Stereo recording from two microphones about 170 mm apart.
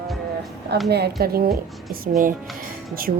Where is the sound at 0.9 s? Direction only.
70° right (ahead or behind).